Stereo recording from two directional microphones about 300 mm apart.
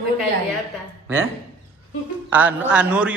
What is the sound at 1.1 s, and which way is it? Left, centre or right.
Speech, centre.